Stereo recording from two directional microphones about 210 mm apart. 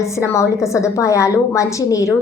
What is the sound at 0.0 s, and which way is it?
A woman's voice, 15° left (ahead or behind).